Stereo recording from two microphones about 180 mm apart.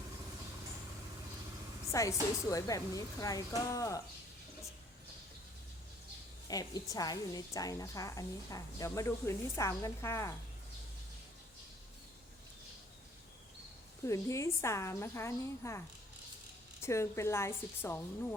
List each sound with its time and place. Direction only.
1.9 s a woman's voice: 15° left (ahead or behind)
6.5 s a woman's voice: 20° left (ahead or behind)
14.1 s a woman's voice: 15° left (ahead or behind)
16.8 s a woman's voice: 15° left (ahead or behind)